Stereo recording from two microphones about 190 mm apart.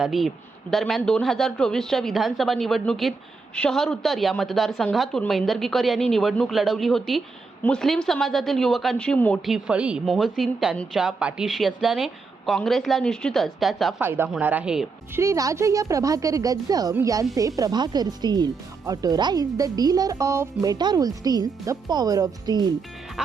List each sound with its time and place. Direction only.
0.0 s a man's voice: centre (ahead or behind)
9.5 s a man's voice: 5° right (ahead or behind)
14.0 s a woman's voice: 10° right (ahead or behind)
15.2 s a woman's voice: 15° right (ahead or behind)